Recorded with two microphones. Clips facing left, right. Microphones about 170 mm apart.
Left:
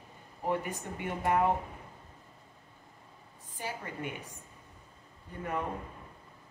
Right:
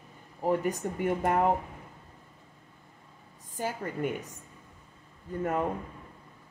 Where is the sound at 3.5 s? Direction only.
45° right (ahead or behind).